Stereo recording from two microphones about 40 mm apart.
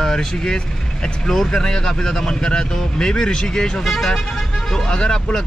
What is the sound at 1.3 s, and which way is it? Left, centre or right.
Speech, centre.